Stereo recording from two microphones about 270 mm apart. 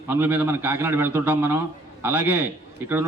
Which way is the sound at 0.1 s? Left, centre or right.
Centre.